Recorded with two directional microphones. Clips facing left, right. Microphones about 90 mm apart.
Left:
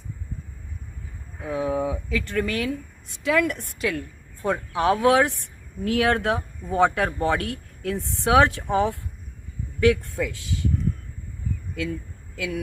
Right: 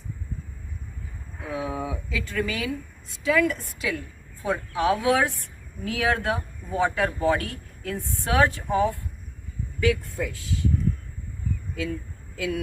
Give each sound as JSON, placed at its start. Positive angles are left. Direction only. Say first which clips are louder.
{"t": 1.4, "sound": "a sound", "louder": "left 5 dB", "side_deg": 0}
{"t": 1.8, "sound": "a woman's voice", "louder": "left 5 dB", "side_deg": 55}
{"t": 9.8, "sound": "speech", "louder": "left 4 dB", "side_deg": 70}